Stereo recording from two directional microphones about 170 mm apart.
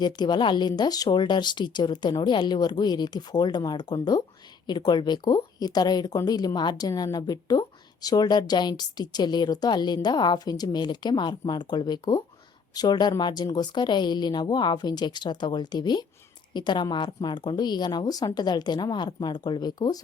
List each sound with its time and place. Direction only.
0.0 s speech: 25° left (ahead or behind)